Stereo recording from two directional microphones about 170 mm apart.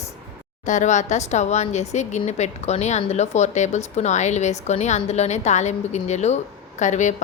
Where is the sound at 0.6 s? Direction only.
45° left (ahead or behind).